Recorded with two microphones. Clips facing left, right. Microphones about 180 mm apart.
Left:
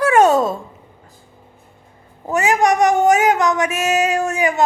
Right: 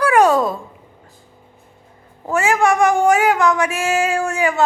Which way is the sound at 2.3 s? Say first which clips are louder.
Even; 20° left (ahead or behind).